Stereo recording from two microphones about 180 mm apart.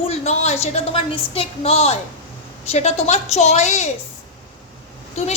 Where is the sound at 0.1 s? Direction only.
35° left (ahead or behind).